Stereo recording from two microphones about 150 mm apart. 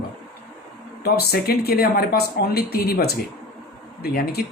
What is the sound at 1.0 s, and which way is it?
Speech, 90° left.